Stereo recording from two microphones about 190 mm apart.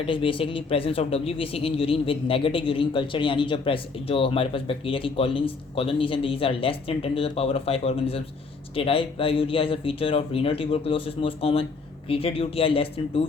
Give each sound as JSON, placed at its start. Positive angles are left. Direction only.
{"t": 0.0, "sound": "speech", "side_deg": 30}